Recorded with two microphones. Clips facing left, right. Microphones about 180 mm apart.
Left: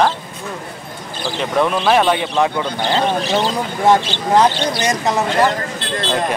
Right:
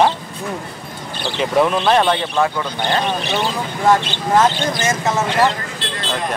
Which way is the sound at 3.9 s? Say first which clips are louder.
Left 1 dB; 15° left (ahead or behind).